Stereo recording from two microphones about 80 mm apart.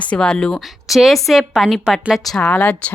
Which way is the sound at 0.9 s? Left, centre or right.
Centre.